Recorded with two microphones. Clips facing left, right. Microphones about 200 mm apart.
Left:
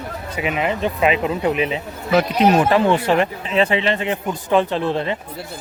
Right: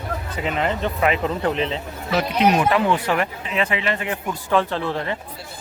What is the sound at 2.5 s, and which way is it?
Speech, 30° left (ahead or behind).